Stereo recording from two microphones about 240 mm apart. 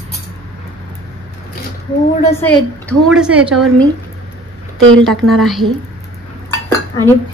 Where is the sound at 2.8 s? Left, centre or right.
Centre.